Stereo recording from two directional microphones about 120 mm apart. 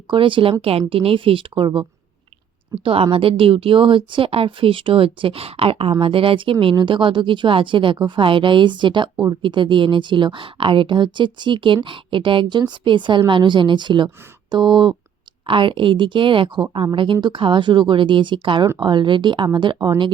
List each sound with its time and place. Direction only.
0.1 s a woman's voice: 45° right (ahead or behind)
2.8 s a woman's voice: 50° right (ahead or behind)